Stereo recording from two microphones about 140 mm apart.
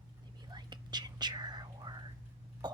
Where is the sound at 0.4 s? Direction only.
30° right (ahead or behind).